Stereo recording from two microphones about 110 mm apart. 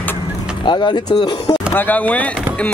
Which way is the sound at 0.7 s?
45° left (ahead or behind).